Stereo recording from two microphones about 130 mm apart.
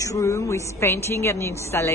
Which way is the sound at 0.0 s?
25° left (ahead or behind).